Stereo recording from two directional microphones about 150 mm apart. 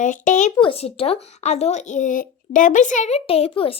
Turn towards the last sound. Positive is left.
turn(degrees=40)  # may be behind; listen again after turning